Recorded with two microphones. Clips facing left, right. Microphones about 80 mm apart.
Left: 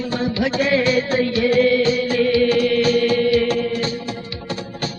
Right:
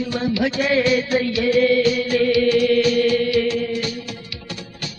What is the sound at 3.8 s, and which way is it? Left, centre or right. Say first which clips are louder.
Music: left 3 dB; left.